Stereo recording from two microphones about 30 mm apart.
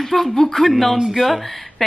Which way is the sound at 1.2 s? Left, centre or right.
Centre.